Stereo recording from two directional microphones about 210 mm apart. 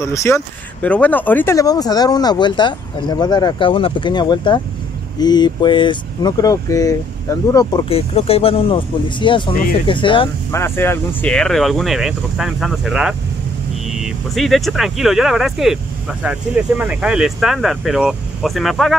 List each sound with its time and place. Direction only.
0.0 s speech: 15° left (ahead or behind)
7.9 s speech: 30° left (ahead or behind)
10.5 s speech: 10° left (ahead or behind)